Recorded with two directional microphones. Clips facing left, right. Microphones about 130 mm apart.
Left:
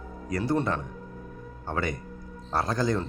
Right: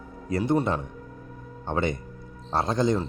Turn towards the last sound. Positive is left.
turn(degrees=-20)  # may be behind; listen again after turning